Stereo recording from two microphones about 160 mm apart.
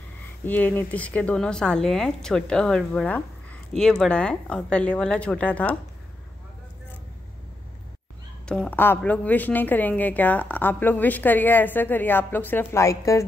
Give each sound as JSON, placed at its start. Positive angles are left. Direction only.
{"t": 0.5, "sound": "a woman's voice", "side_deg": 10}
{"t": 8.5, "sound": "a woman's voice", "side_deg": 10}